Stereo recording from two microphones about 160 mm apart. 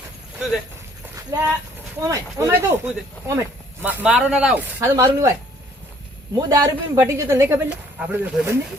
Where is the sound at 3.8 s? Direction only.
10° right (ahead or behind).